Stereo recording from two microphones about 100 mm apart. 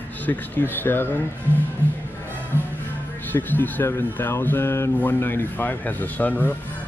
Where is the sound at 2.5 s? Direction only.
20° left (ahead or behind).